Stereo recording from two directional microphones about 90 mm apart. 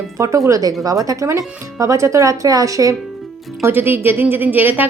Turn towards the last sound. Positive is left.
turn(degrees=-20)  # may be behind; listen again after turning